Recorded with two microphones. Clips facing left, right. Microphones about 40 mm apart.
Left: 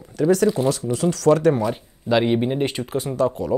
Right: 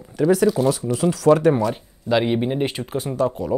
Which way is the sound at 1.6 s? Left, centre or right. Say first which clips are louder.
Right 1 dB; centre.